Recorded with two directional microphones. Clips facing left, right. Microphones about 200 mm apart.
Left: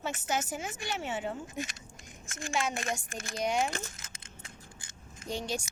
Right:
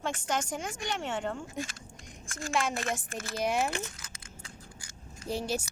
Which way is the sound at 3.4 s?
5° right (ahead or behind).